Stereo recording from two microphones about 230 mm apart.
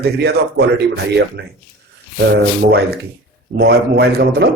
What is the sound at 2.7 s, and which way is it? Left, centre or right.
A man's voice, right.